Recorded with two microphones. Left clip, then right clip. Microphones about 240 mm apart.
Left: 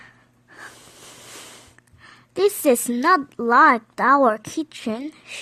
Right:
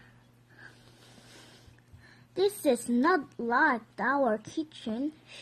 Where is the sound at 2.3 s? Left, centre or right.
Left.